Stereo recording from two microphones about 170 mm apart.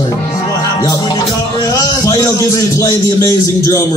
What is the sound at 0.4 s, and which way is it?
Music, 20° left (ahead or behind).